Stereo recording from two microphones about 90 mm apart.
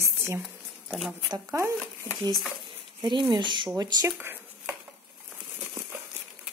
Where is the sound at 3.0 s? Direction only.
60° right (ahead or behind).